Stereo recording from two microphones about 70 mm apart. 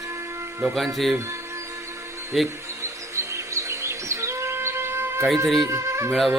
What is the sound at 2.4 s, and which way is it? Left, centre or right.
Music, right.